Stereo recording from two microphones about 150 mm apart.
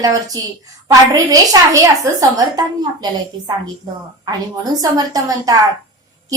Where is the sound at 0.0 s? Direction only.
25° right (ahead or behind).